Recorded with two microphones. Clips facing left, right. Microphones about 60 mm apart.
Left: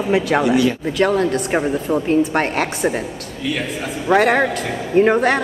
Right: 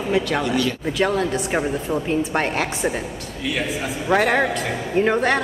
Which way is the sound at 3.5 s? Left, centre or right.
Centre.